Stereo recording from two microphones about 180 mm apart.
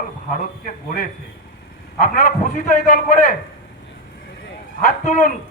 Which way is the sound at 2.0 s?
50° left (ahead or behind).